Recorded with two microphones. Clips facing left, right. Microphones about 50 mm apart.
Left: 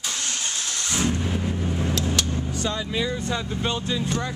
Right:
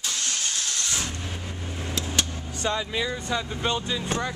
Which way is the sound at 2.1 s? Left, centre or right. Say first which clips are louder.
Left 3 dB; right.